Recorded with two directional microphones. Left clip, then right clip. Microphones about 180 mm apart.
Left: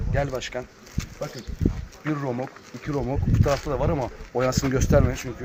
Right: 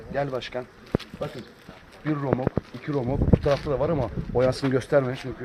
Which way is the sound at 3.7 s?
20° right (ahead or behind).